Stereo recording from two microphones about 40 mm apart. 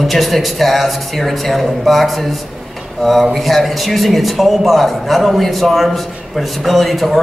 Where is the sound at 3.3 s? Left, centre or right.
Centre.